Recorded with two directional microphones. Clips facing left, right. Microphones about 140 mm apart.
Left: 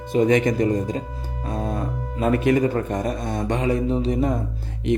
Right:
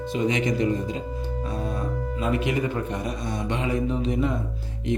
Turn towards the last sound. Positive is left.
turn(degrees=35)  # may be behind; listen again after turning